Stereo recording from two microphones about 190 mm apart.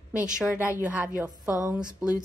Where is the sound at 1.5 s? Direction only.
15° left (ahead or behind).